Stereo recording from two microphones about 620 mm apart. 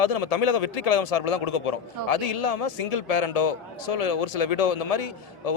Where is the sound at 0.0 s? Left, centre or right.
Left.